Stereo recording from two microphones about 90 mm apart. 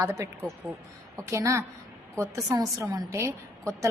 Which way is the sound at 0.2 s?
30° right (ahead or behind).